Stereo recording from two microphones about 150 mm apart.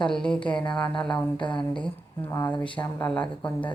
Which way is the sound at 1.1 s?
30° left (ahead or behind).